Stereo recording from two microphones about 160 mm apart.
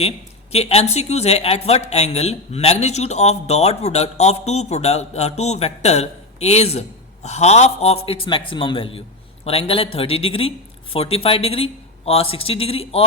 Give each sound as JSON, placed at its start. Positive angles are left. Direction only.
{"t": 0.5, "sound": "speech", "side_deg": 40}